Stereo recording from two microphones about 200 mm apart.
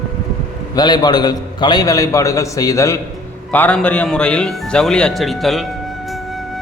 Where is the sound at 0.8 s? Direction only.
20° left (ahead or behind).